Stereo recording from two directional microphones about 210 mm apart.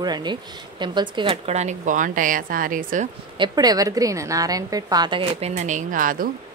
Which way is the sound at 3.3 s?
20° right (ahead or behind).